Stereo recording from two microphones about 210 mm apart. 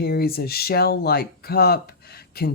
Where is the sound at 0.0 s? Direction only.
50° left (ahead or behind).